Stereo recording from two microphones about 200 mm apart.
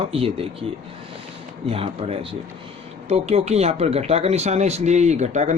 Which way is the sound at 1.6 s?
30° right (ahead or behind).